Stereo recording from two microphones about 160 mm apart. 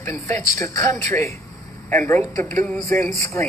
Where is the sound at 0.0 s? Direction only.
20° left (ahead or behind).